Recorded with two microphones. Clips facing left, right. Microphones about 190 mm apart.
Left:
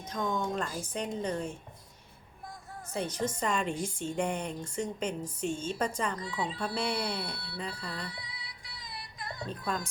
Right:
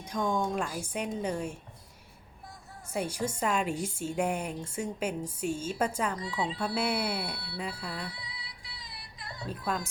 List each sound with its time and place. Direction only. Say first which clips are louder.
0.0 s a woman's voice: right 3 dB; 10° right (ahead or behind)
2.9 s a woman's voice: right 1 dB; 10° right (ahead or behind)
8.1 s music: even; 50° left (ahead or behind)
9.5 s speech: right 2 dB; 5° right (ahead or behind)